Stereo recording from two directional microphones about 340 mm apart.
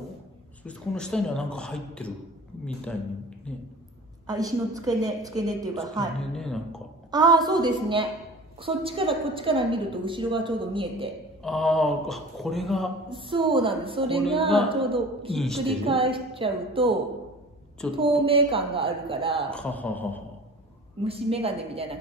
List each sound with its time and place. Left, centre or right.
0.7 s speech: centre
4.3 s a woman's voice: centre
6.3 s speech: centre
7.1 s a woman's voice: centre
11.4 s speech: centre
13.1 s a woman's voice: centre
15.3 s speech: centre
15.6 s a woman's voice: centre
17.9 s a woman's voice: centre
19.5 s speech: centre
21.0 s a woman's voice: centre